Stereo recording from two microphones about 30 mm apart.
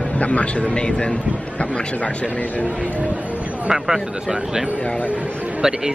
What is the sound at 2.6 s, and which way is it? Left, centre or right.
Speech, right.